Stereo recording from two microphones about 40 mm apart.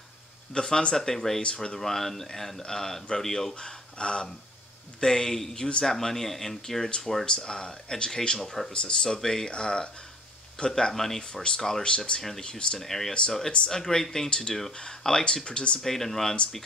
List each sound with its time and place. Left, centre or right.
0.5 s speech: centre
7.2 s speech: centre
15.8 s speech: centre